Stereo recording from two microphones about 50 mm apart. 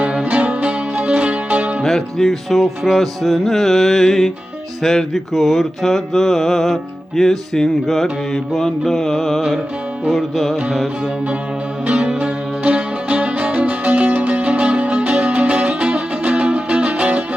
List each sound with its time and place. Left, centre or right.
0.0 s music: right
1.8 s music: centre
2.5 s mantra: centre
10.1 s mantra: centre
11.9 s music: right